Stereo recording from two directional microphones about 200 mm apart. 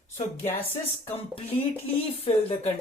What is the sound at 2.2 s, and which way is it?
Speech, 30° left (ahead or behind).